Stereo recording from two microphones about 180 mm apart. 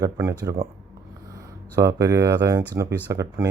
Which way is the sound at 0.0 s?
15° right (ahead or behind).